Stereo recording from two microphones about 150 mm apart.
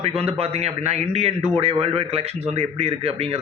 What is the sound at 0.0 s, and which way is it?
A man's voice, 40° right (ahead or behind).